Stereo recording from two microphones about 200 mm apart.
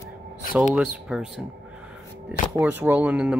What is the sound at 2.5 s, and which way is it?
Speech, 10° right (ahead or behind).